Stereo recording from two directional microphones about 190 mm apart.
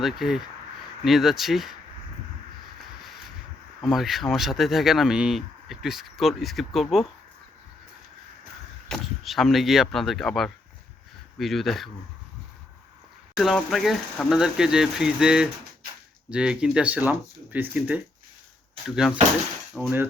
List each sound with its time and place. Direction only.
0.0 s speech: centre (ahead or behind)
3.8 s speech: centre (ahead or behind)
8.9 s speech: centre (ahead or behind)
13.3 s speech: centre (ahead or behind)